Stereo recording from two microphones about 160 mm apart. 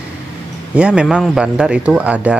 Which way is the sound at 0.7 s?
5° right (ahead or behind).